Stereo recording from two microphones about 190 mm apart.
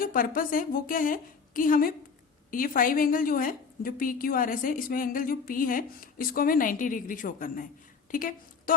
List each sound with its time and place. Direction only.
0.0 s a woman's voice: 50° left (ahead or behind)